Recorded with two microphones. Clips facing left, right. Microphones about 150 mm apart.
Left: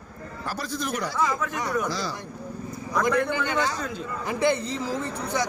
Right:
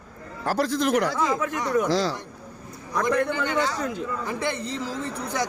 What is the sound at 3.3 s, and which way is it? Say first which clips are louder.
Speech: right 1 dB; 15° left (ahead or behind).